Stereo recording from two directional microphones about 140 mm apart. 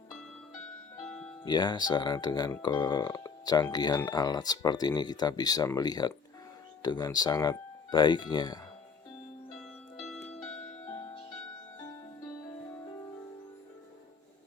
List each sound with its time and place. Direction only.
0.9 s music: 5° left (ahead or behind)
1.5 s speech: 30° left (ahead or behind)
9.6 s music: 5° left (ahead or behind)